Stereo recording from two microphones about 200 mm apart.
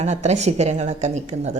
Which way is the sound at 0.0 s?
35° right (ahead or behind).